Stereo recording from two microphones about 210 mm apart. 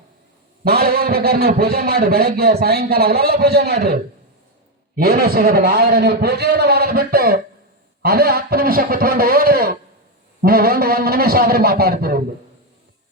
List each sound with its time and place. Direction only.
0.6 s a man's voice: 45° right (ahead or behind)
4.9 s a man's voice: 45° right (ahead or behind)